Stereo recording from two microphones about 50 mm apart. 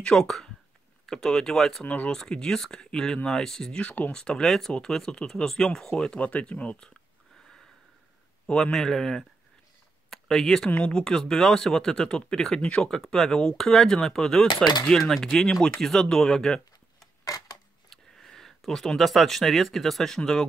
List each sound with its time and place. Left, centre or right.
0.0 s speech: centre
6.1 s speech: left
8.7 s speech: centre
17.8 s a sound: centre
18.7 s speech: centre